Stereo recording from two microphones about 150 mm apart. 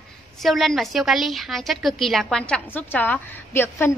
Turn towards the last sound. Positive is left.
turn(degrees=15)  # may be behind; listen again after turning